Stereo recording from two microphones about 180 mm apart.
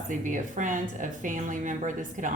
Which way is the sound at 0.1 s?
45° right (ahead or behind).